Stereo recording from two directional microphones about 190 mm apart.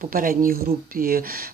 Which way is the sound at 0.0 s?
45° right (ahead or behind).